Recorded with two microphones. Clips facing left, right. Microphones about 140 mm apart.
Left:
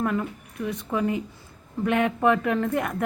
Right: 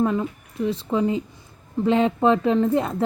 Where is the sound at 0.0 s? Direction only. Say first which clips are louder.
Right 4 dB; 20° right (ahead or behind).